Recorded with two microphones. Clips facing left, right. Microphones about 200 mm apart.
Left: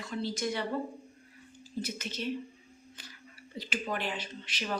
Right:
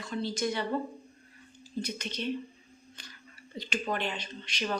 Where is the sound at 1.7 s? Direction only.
5° left (ahead or behind).